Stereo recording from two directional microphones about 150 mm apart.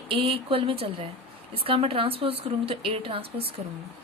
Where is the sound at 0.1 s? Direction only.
35° right (ahead or behind).